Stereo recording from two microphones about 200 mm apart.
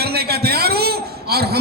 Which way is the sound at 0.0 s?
50° right (ahead or behind).